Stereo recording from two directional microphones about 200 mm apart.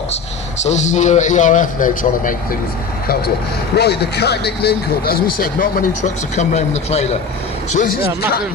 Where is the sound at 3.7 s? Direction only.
55° left (ahead or behind); by 7.1 s 30° left (ahead or behind).